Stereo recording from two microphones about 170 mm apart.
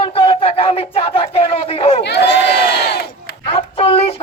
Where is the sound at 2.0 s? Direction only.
80° left.